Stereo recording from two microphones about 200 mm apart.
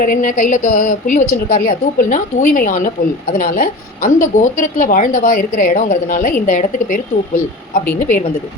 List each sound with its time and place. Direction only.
0.0 s a woman's voice: 45° left (ahead or behind)